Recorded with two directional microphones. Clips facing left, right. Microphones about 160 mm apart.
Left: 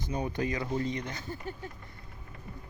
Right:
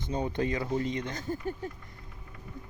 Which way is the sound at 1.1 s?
45° right (ahead or behind).